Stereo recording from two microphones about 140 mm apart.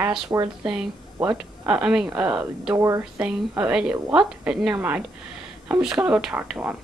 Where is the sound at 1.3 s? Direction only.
5° right (ahead or behind).